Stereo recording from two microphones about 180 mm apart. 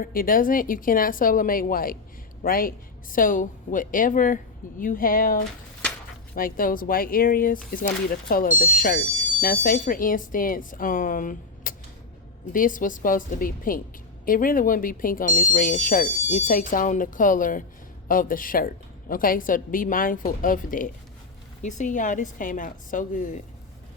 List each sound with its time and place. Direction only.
0.0 s speech: 50° left (ahead or behind)